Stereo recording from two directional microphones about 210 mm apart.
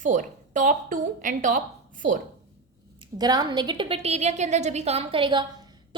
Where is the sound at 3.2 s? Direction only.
20° right (ahead or behind).